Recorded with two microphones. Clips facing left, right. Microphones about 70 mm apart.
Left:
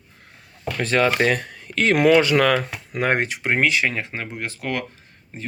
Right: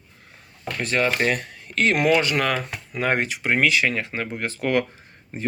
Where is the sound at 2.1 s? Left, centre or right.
Left.